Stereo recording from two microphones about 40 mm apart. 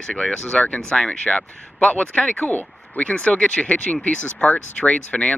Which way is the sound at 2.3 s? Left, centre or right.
Left.